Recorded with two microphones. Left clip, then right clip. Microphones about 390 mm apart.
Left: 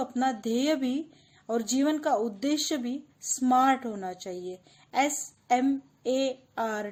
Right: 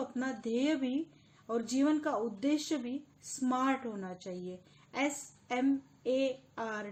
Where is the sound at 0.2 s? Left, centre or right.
Left.